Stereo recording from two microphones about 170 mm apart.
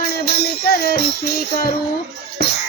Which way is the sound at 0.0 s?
65° left (ahead or behind).